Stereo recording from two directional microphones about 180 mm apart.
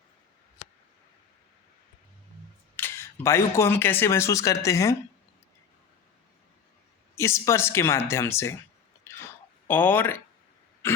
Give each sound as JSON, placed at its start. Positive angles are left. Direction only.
{"t": 2.7, "sound": "speech", "side_deg": 15}
{"t": 7.2, "sound": "speech", "side_deg": 15}
{"t": 9.1, "sound": "a sound", "side_deg": 15}
{"t": 9.6, "sound": "speech", "side_deg": 10}
{"t": 10.8, "sound": "pig", "side_deg": 15}